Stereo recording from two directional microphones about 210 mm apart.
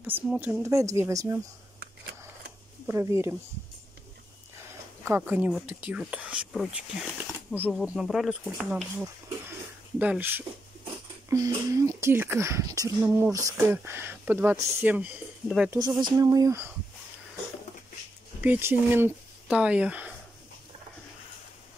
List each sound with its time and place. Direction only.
0.0 s speech: 10° right (ahead or behind)
2.9 s speech: 15° right (ahead or behind)
5.0 s speech: 10° right (ahead or behind)
9.5 s a sound: 5° right (ahead or behind)
11.2 s speech: 15° right (ahead or behind)
15.8 s speech: 20° right (ahead or behind)
18.4 s speech: 10° right (ahead or behind)